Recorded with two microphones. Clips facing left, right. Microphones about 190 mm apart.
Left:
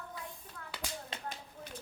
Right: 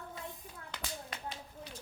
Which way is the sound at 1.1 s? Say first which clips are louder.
Left 1 dB; 25° left (ahead or behind).